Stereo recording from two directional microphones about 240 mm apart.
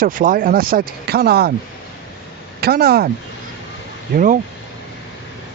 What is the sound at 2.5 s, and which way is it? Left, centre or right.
Speech, right.